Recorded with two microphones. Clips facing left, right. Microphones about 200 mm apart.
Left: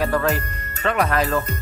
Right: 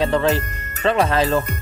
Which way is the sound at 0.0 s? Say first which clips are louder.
Right 3 dB; 25° right (ahead or behind).